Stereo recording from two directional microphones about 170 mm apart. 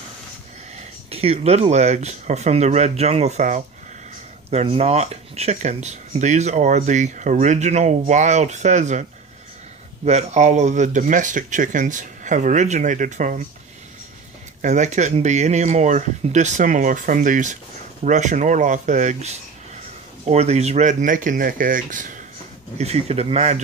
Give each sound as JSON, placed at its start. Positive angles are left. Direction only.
{"t": 1.1, "sound": "speech", "side_deg": -35}
{"t": 10.0, "sound": "speech", "side_deg": -40}
{"t": 14.6, "sound": "speech", "side_deg": -45}
{"t": 22.8, "sound": "speech", "side_deg": -40}